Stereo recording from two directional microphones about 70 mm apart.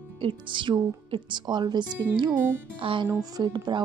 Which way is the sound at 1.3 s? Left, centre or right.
Right.